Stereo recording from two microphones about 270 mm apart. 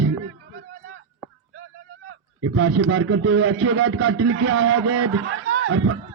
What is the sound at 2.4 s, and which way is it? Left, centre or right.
A man's voice, right.